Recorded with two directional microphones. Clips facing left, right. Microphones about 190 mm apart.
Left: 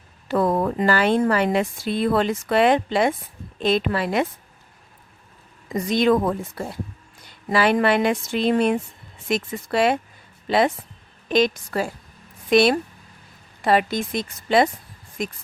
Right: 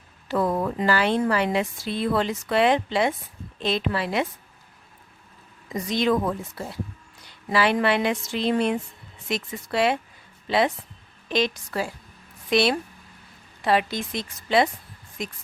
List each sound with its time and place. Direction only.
0.3 s a woman's voice: 50° left (ahead or behind)
5.7 s a woman's voice: 50° left (ahead or behind)
11.3 s a woman's voice: 50° left (ahead or behind)